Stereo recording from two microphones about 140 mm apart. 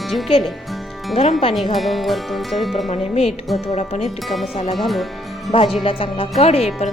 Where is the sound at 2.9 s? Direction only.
50° left (ahead or behind).